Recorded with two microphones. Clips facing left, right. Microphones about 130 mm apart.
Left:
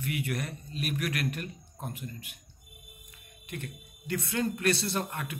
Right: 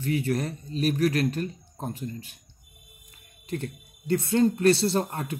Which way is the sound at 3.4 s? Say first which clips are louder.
Right 8 dB; 30° right (ahead or behind).